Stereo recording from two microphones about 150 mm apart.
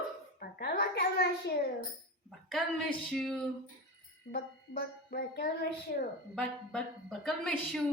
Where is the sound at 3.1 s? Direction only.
5° left (ahead or behind).